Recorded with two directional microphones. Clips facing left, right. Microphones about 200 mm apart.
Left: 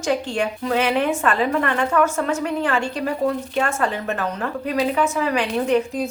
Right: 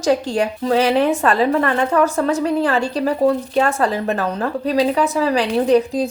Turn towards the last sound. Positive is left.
turn(degrees=-35)  # may be behind; listen again after turning